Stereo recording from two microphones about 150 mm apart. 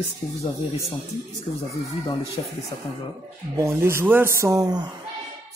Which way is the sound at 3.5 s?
20° right (ahead or behind).